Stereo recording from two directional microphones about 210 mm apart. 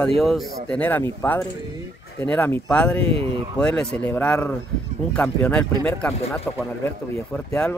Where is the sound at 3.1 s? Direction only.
25° right (ahead or behind).